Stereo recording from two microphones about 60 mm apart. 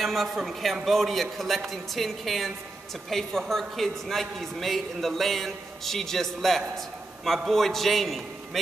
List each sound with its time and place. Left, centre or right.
0.0 s a man's voice: centre